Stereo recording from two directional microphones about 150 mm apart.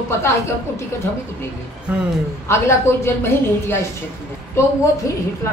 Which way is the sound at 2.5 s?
15° left (ahead or behind).